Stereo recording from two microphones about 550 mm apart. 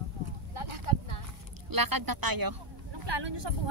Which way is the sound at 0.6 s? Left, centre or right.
Right.